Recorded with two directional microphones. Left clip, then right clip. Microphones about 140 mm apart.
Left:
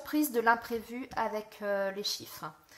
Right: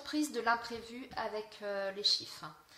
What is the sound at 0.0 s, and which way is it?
A woman's voice, 50° left (ahead or behind).